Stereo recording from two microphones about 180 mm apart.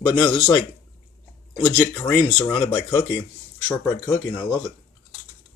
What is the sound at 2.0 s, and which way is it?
Speech, 15° left (ahead or behind).